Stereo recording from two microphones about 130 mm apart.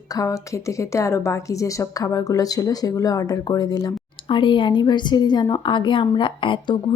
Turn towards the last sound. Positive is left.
turn(degrees=40)  # may be behind; listen again after turning